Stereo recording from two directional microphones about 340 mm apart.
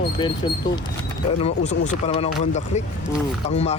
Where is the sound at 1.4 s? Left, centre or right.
Centre.